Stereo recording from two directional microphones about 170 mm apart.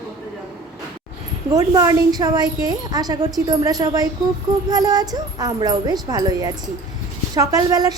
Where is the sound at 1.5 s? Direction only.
20° right (ahead or behind).